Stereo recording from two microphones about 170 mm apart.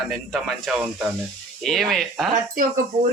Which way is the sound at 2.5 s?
50° right (ahead or behind).